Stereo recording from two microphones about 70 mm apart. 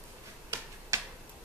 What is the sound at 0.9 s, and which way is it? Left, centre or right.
Tick-tock, right.